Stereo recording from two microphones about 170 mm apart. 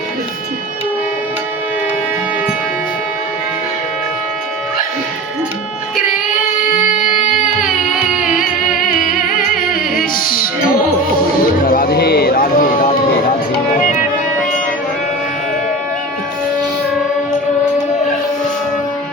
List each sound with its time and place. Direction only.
6.7 s music: 50° left (ahead or behind)
8.2 s music: centre (ahead or behind)
8.7 s music: 55° left (ahead or behind)